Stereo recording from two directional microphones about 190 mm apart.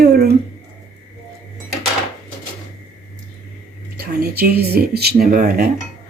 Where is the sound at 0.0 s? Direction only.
55° right (ahead or behind).